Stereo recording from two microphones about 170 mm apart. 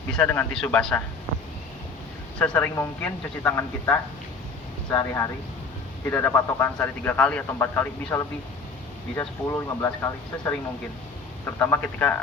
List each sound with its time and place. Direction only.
0.2 s speech: 10° left (ahead or behind)
2.4 s speech: 10° left (ahead or behind)
11.7 s speech: 10° left (ahead or behind)